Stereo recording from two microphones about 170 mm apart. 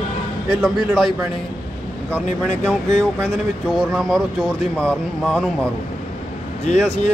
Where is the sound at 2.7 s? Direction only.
5° left (ahead or behind).